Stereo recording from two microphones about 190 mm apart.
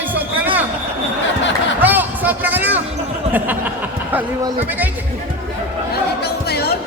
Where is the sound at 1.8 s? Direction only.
10° right (ahead or behind).